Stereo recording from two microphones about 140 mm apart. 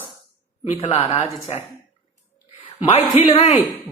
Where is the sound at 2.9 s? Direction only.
50° left (ahead or behind).